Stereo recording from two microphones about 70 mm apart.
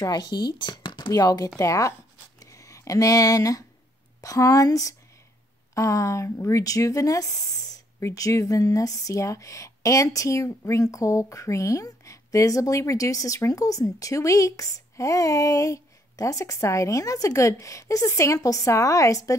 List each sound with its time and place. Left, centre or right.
0.0 s speech: left
1.6 s a woman's voice: left
6.6 s speech: left